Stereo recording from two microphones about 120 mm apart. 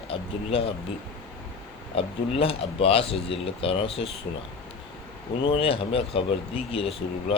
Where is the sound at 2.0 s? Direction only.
50° left (ahead or behind).